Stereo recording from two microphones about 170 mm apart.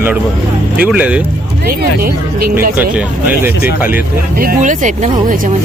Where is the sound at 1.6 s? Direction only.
65° right (ahead or behind).